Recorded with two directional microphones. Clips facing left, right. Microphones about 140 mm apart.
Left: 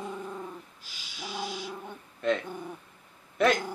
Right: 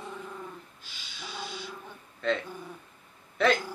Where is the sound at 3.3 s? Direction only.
15° left (ahead or behind).